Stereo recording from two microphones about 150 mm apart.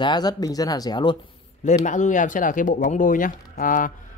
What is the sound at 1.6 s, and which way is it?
Speech, 55° left (ahead or behind).